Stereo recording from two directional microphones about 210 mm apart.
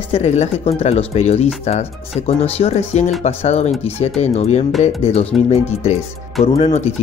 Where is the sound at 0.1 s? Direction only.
30° left (ahead or behind).